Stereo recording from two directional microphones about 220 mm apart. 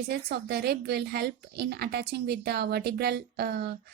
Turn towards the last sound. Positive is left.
turn(degrees=-45)  # may be behind; listen again after turning